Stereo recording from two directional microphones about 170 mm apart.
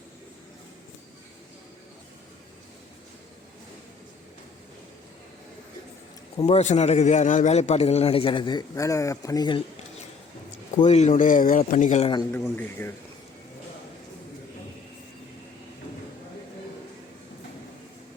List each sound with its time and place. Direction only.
6.3 s speech: 40° left (ahead or behind)
10.8 s speech: 40° left (ahead or behind)
11.1 s speech: 50° left (ahead or behind)
12.3 s speech: 10° left (ahead or behind)